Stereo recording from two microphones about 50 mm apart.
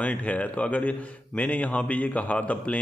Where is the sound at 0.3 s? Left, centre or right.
Left.